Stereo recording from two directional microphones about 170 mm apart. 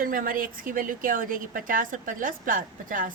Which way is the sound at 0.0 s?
55° right (ahead or behind).